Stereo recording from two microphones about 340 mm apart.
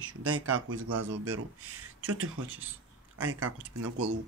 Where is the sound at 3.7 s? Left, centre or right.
Right.